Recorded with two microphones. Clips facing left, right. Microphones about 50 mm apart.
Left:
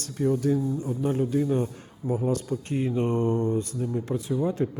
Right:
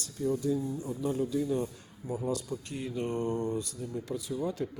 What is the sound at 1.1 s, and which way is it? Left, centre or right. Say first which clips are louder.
A man's voice: left 5 dB; left.